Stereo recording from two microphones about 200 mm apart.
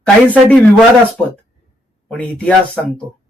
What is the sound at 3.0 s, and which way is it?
Speech, 30° right (ahead or behind).